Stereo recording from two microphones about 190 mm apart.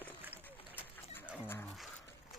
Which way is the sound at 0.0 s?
10° right (ahead or behind).